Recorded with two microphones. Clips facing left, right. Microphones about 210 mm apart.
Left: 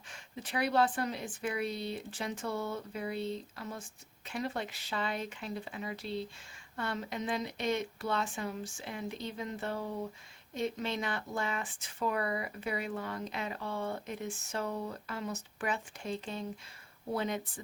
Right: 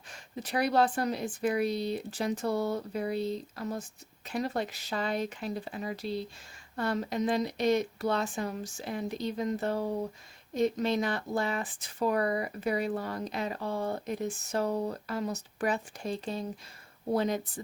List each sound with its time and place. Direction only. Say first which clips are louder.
0.1 s speech: right 5 dB; 40° right (ahead or behind)